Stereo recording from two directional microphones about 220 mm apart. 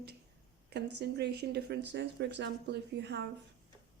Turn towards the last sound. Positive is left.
turn(degrees=-50)  # may be behind; listen again after turning